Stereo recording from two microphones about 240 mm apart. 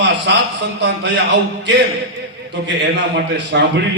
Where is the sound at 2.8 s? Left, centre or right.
Right.